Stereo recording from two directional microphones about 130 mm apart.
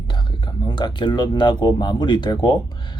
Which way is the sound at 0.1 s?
35° left (ahead or behind).